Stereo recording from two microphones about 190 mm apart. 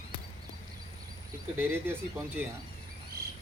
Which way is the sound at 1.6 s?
10° right (ahead or behind).